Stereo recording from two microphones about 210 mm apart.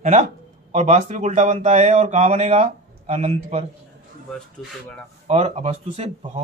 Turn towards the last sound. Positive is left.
turn(degrees=-30)  # may be behind; listen again after turning